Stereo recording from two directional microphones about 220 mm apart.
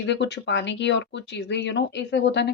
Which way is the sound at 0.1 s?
50° left (ahead or behind).